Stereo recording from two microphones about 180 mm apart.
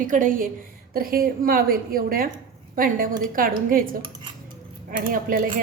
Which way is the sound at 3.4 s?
50° right (ahead or behind).